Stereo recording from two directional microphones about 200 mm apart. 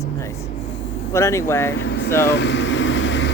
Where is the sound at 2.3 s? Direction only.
60° left (ahead or behind).